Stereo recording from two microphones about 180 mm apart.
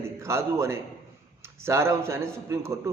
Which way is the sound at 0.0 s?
15° right (ahead or behind).